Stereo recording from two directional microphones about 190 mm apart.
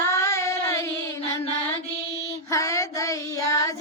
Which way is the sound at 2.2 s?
15° left (ahead or behind).